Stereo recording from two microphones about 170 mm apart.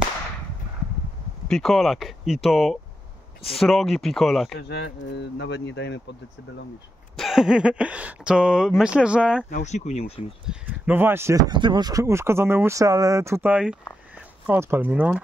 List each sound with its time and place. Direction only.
1.5 s speech: centre (ahead or behind)
4.6 s speech: 90° left
7.2 s speech: centre (ahead or behind)
9.5 s speech: 45° left (ahead or behind)
10.4 s speech: 5° right (ahead or behind)